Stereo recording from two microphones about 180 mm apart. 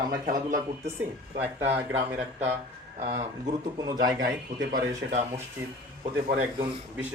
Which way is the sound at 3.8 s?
20° right (ahead or behind).